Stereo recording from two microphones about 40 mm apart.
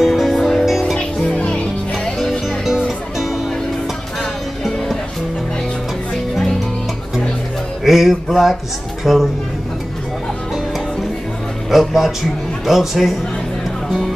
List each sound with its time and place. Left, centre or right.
0.0 s music: centre
0.9 s music: left
7.8 s music: centre
9.0 s a woman's voice: centre
11.7 s speech: centre